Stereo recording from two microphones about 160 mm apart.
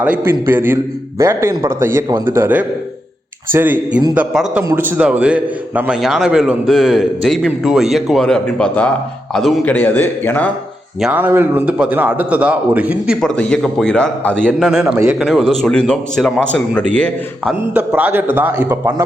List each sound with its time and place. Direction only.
0.0 s a man's voice: 10° right (ahead or behind); by 10.5 s 10° left (ahead or behind)
11.0 s a man's voice: 10° right (ahead or behind)
13.2 s a man's voice: 5° left (ahead or behind)
14.8 s a man's voice: 15° right (ahead or behind)
15.2 s a man's voice: centre (ahead or behind)
17.7 s a man's voice: 10° right (ahead or behind)